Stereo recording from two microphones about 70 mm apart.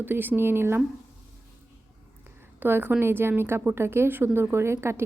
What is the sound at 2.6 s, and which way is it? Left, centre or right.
A woman's voice, right.